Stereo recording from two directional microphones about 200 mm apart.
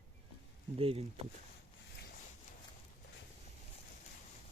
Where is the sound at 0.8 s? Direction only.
30° right (ahead or behind).